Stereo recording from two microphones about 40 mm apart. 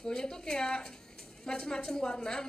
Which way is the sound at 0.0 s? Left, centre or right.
Centre.